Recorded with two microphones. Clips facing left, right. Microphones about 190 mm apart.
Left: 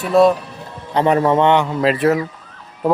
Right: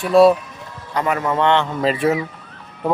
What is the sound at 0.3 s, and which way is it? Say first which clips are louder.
Music: left 3 dB; 35° left (ahead or behind).